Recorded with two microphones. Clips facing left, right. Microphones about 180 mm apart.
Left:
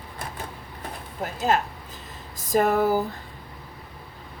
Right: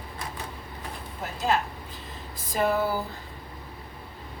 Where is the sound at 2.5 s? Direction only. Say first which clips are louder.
Left 5 dB; 45° left (ahead or behind).